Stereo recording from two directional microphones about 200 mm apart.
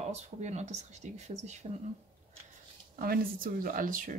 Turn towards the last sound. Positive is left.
turn(degrees=-45)  # may be behind; listen again after turning